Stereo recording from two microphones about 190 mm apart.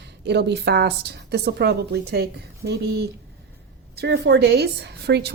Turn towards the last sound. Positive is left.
turn(degrees=-60)  # may be behind; listen again after turning